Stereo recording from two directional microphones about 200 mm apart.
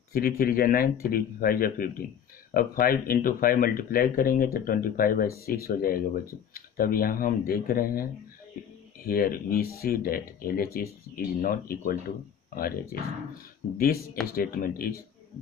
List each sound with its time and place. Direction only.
0.1 s speech: 50° left (ahead or behind)
13.7 s speech: 50° left (ahead or behind)